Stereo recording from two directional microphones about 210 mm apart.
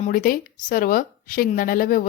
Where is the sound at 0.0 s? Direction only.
40° left (ahead or behind).